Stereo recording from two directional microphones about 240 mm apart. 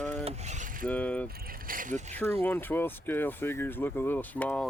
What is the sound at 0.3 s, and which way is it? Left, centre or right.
Mechanisms, right.